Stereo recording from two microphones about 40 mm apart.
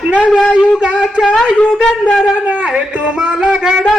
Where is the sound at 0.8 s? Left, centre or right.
Centre.